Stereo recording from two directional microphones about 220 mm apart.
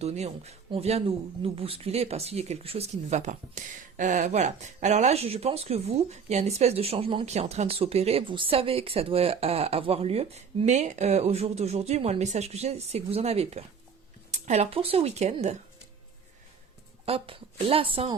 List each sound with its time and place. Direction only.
0.0 s speech: 30° right (ahead or behind)
17.1 s speech: 25° right (ahead or behind)